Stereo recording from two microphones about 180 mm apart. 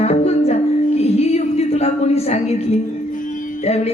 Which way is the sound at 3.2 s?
40° left (ahead or behind).